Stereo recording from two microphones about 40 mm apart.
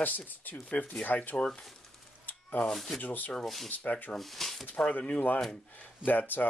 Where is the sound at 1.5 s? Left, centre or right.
Centre.